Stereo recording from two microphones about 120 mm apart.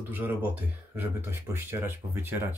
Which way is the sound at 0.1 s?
15° right (ahead or behind).